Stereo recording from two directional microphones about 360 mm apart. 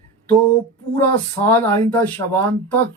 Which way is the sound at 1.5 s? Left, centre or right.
Centre.